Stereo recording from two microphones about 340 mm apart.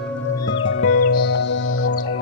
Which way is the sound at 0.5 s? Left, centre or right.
Left.